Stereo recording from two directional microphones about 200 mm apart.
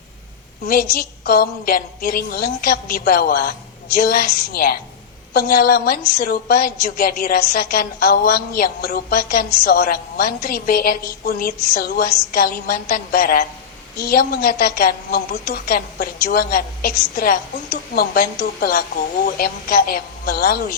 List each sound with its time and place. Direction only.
0.7 s a woman's voice: 50° left (ahead or behind)